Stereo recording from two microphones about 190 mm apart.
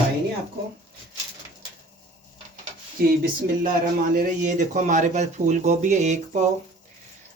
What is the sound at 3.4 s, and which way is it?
A man's voice, 45° right (ahead or behind).